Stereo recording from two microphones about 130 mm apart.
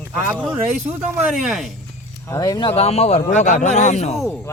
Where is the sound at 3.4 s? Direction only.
70° left (ahead or behind).